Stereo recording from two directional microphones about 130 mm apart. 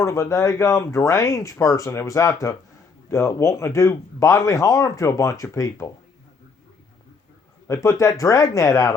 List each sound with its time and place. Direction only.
0.0 s speech: 20° left (ahead or behind)
7.7 s speech: 25° left (ahead or behind)